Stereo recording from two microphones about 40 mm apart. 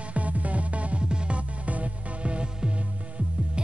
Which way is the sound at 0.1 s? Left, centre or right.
Right.